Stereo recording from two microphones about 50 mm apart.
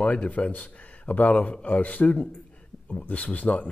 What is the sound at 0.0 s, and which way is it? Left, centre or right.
Speech, left.